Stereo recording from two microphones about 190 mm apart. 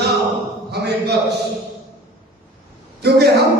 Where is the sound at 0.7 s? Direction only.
60° right (ahead or behind).